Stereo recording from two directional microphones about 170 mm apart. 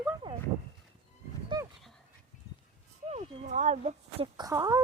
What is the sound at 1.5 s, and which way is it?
Dog, 25° right (ahead or behind).